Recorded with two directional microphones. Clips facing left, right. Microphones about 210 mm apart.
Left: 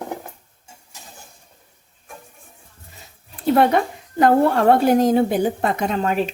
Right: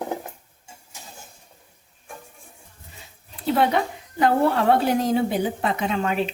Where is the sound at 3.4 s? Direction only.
50° left (ahead or behind).